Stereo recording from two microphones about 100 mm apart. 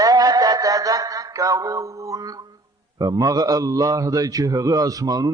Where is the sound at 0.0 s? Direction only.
40° right (ahead or behind).